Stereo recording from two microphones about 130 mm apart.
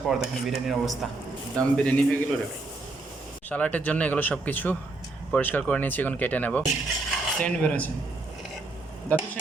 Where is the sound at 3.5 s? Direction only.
10° left (ahead or behind).